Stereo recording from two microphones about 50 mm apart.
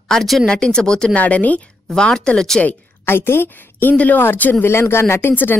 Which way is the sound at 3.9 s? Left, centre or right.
Left.